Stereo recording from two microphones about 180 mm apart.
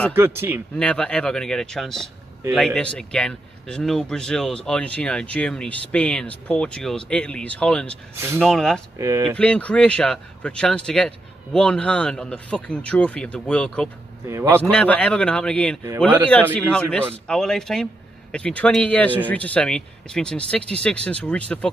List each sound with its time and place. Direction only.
0.1 s speech: 15° right (ahead or behind)
0.7 s a man's voice: 5° left (ahead or behind)
8.2 s speech: 10° right (ahead or behind)
8.5 s a man's voice: centre (ahead or behind)
8.9 s speech: 15° right (ahead or behind)
9.4 s a man's voice: 5° left (ahead or behind)
14.2 s speech: 15° right (ahead or behind)
14.5 s a man's voice: 5° left (ahead or behind)